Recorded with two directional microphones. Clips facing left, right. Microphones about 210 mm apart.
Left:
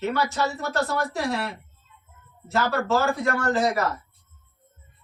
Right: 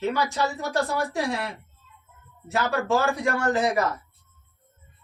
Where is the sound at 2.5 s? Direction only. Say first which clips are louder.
Left 1 dB; 15° right (ahead or behind).